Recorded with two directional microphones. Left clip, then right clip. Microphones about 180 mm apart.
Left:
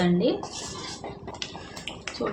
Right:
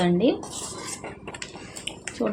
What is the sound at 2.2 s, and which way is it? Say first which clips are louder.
Speech: right 3 dB; 25° right (ahead or behind).